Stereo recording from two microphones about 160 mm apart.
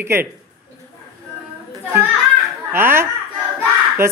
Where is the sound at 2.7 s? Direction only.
15° right (ahead or behind).